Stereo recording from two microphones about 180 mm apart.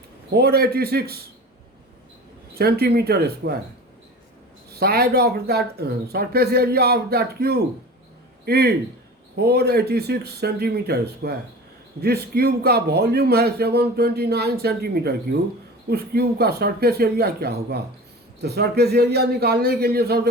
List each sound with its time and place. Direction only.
0.3 s a man's voice: 60° right (ahead or behind)
2.6 s a man's voice: 60° right (ahead or behind)
4.7 s a man's voice: 60° right (ahead or behind)